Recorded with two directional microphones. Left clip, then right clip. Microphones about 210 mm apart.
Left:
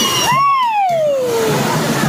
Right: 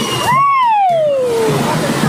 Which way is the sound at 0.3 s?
5° right (ahead or behind).